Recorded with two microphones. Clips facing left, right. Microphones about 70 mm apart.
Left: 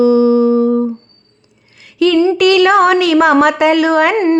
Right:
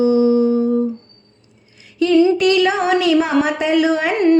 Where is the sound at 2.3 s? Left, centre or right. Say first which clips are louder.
Left 6 dB; left.